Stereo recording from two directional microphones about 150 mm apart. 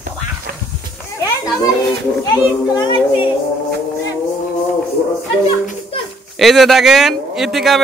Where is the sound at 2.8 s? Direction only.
30° left (ahead or behind).